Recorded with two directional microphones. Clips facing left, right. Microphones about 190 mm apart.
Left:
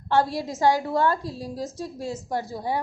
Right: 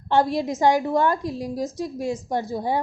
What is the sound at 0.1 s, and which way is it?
A woman's voice, 15° right (ahead or behind).